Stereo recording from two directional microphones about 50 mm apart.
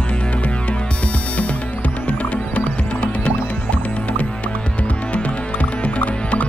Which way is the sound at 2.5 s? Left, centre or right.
Left.